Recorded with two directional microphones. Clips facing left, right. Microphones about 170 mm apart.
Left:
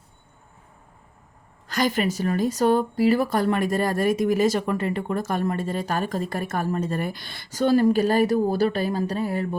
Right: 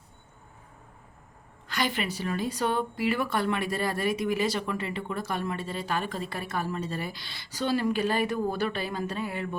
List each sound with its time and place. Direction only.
1.6 s speech: 40° left (ahead or behind)